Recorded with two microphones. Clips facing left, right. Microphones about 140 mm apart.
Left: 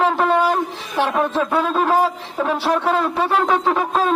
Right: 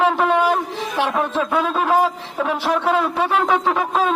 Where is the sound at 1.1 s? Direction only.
10° left (ahead or behind).